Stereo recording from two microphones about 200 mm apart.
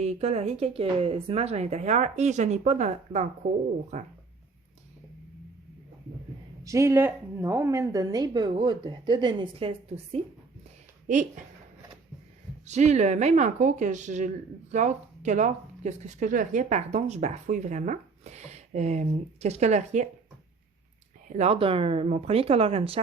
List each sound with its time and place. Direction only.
0.0 s speech: 30° right (ahead or behind)
6.7 s a woman's voice: 15° right (ahead or behind)
12.6 s speech: 35° right (ahead or behind)
21.2 s a woman's voice: 35° right (ahead or behind)